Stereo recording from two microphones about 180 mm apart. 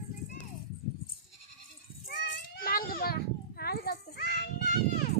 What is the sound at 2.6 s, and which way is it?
Children playing, 55° left (ahead or behind).